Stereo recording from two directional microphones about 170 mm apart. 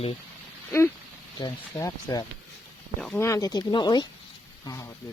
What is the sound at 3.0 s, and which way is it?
Speech, 5° left (ahead or behind).